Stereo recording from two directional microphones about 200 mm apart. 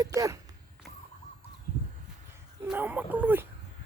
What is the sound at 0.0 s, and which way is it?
Speech, 15° right (ahead or behind).